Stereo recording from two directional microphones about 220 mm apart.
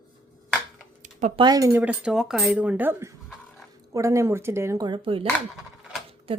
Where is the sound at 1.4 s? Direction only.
15° right (ahead or behind).